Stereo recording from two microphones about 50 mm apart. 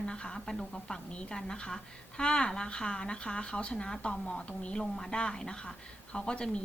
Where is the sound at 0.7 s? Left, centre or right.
Centre.